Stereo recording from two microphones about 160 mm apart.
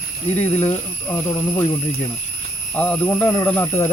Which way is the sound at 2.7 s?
10° left (ahead or behind).